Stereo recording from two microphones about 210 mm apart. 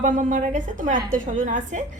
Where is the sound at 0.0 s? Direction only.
35° right (ahead or behind).